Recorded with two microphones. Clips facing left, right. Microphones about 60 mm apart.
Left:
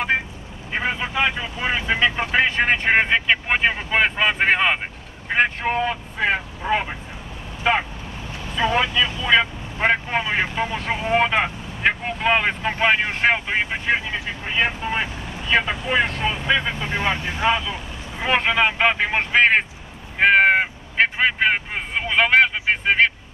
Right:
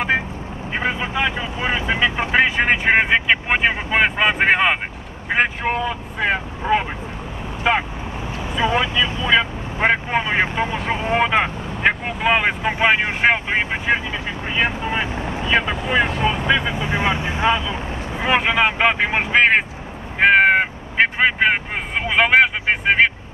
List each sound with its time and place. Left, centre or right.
0.7 s vehicle: centre
1.3 s speech: centre
1.7 s speech: centre
8.4 s speech: centre
15.0 s speech: right
15.4 s speech: centre; by 17.7 s right
18.2 s speech: centre
20.2 s caw: centre